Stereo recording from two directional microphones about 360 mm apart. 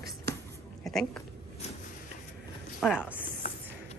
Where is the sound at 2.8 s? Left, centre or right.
Centre.